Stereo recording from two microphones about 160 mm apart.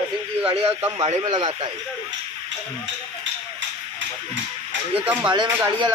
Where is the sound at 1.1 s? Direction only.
30° right (ahead or behind).